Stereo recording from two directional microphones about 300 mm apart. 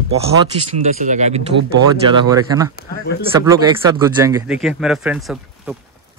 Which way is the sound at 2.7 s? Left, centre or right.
Left.